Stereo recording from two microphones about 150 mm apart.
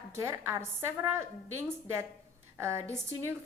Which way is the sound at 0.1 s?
15° right (ahead or behind).